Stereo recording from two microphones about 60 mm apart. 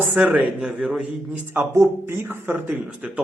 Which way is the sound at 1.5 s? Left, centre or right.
Right.